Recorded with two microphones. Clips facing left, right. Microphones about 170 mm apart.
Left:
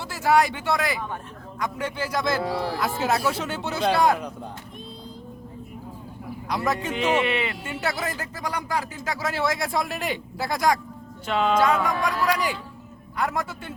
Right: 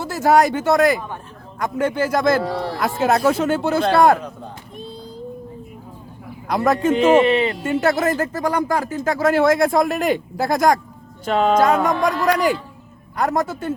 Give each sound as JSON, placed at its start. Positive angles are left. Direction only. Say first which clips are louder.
{"t": 0.0, "sound": "speech", "louder": "right 5 dB", "side_deg": -45}
{"t": 2.5, "sound": "a man's voice", "louder": "right 3 dB", "side_deg": 5}
{"t": 3.0, "sound": "speech", "louder": "right 9 dB", "side_deg": -50}
{"t": 6.5, "sound": "speech", "louder": "right 9 dB", "side_deg": -50}
{"t": 7.6, "sound": "speech", "louder": "right 10 dB", "side_deg": -50}